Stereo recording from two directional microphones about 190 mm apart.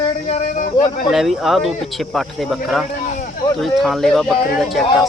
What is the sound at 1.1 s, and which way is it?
Speech, centre (ahead or behind).